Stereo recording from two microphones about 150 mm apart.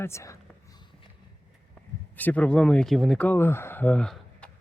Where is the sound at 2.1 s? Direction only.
10° left (ahead or behind).